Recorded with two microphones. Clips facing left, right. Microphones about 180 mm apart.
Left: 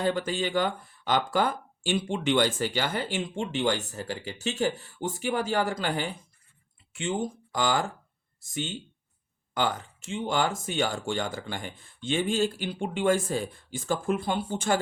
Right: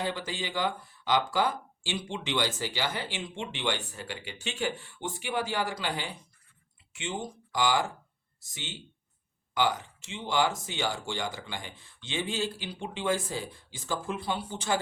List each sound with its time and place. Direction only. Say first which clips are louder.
0.0 s speech: left 6 dB; 50° left (ahead or behind)